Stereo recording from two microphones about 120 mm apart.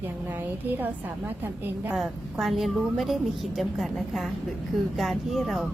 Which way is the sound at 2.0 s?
Centre (ahead or behind).